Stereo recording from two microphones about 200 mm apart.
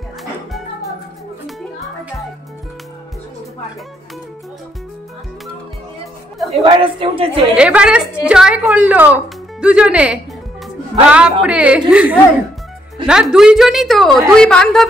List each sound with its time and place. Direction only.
0.2 s music: centre (ahead or behind)
6.3 s a sound: centre (ahead or behind)
6.6 s a woman's voice: 25° right (ahead or behind)
7.5 s a woman's voice: 5° right (ahead or behind)